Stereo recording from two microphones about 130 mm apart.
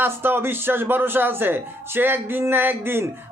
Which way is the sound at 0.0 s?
15° right (ahead or behind).